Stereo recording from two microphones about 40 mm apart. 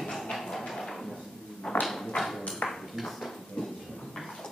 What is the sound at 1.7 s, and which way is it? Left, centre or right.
Dog, centre.